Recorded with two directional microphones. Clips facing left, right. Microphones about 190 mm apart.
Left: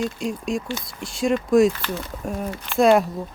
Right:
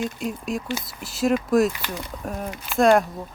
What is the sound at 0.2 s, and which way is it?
Speech, 5° right (ahead or behind).